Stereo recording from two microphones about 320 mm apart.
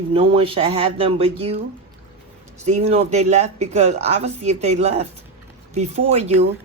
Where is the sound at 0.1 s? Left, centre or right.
Centre.